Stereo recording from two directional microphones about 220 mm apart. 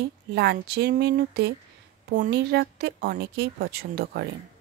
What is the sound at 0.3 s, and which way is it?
Speech, 50° right (ahead or behind).